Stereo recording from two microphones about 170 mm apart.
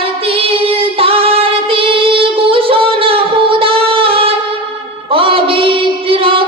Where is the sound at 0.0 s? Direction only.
35° right (ahead or behind).